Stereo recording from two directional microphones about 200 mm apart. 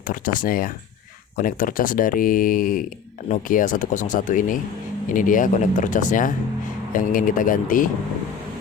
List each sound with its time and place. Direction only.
0.1 s speech: 45° left (ahead or behind)